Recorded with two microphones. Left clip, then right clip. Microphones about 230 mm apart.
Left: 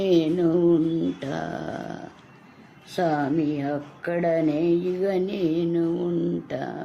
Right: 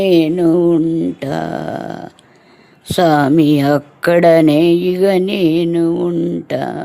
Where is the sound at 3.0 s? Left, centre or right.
Right.